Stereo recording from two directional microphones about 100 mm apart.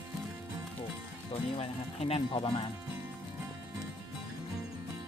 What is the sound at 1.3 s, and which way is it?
Speech, 70° left (ahead or behind).